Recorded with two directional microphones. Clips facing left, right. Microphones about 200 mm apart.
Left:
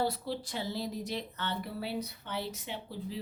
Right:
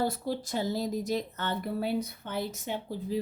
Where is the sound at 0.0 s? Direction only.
45° right (ahead or behind).